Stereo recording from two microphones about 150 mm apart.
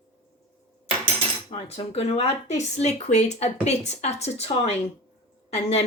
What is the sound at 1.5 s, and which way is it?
Speech, 45° left (ahead or behind).